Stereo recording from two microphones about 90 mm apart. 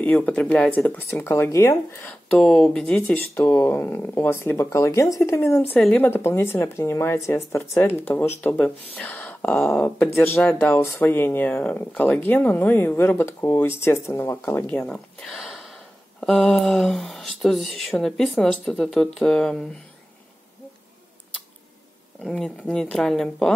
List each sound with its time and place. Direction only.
0.0 s speech: 15° left (ahead or behind)
1.2 s speech: 30° left (ahead or behind)
2.0 s speech: 5° left (ahead or behind)
3.2 s speech: 25° left (ahead or behind)
5.8 s speech: 10° left (ahead or behind)
6.0 s speech: 25° left (ahead or behind)
9.8 s speech: 25° left (ahead or behind)
14.8 s speech: 10° left (ahead or behind)
15.3 s a sound: 5° right (ahead or behind)
17.4 s speech: centre (ahead or behind)
22.2 s speech: 5° left (ahead or behind)